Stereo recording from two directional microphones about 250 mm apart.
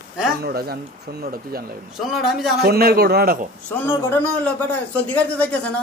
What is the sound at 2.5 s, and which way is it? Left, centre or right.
Speech, right.